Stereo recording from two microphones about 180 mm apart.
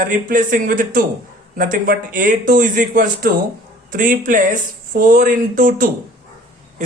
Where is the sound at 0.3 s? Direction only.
50° right (ahead or behind).